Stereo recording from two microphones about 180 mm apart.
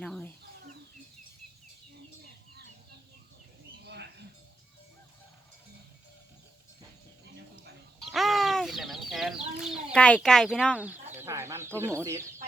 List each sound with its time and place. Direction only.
0.0 s chicken: 5° left (ahead or behind)
3.8 s mouse: 70° right (ahead or behind)
8.1 s chicken: centre (ahead or behind)
9.9 s speech: 5° left (ahead or behind)
11.2 s a sound: 15° right (ahead or behind)